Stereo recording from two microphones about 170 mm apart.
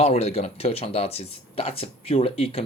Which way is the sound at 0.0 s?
35° left (ahead or behind).